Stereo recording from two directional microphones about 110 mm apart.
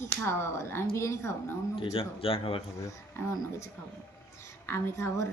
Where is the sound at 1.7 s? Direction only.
55° left (ahead or behind).